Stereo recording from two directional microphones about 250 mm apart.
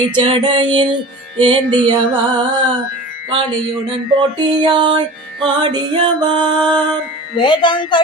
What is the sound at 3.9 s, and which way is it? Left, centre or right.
Music, centre.